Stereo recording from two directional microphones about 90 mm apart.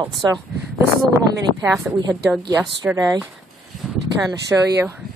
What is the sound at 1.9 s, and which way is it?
Speech, 10° right (ahead or behind).